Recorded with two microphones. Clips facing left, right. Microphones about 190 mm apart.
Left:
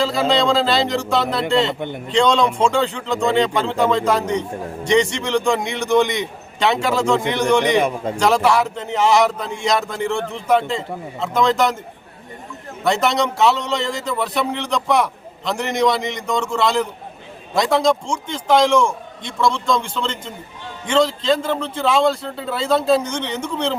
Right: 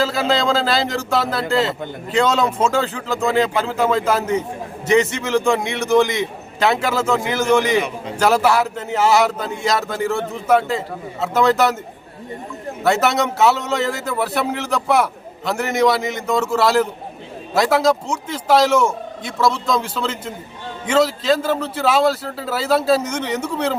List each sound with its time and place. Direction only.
0.0 s speech: centre (ahead or behind)
7.8 s a man's voice: 50° left (ahead or behind)
8.1 s speech: 5° right (ahead or behind)
12.8 s a man's voice: 5° right (ahead or behind)